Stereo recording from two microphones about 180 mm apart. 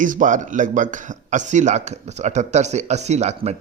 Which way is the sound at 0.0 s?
45° right (ahead or behind).